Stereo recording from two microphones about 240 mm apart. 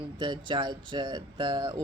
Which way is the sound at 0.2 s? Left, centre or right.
Right.